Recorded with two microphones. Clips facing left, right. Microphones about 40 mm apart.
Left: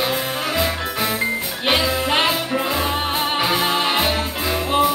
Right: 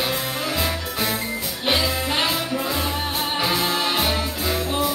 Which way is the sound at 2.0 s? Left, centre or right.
Left.